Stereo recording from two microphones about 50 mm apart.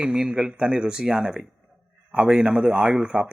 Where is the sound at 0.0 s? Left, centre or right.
Centre.